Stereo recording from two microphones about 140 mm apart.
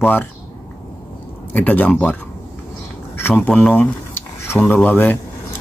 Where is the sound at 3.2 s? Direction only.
15° left (ahead or behind).